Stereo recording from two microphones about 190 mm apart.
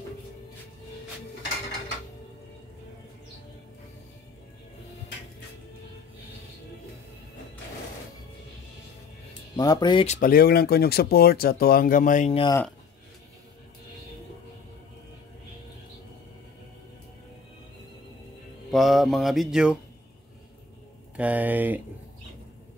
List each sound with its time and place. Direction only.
9.6 s speech: 20° left (ahead or behind)
10.0 s speech: 40° left (ahead or behind)
18.7 s speech: centre (ahead or behind)
21.2 s speech: 10° right (ahead or behind)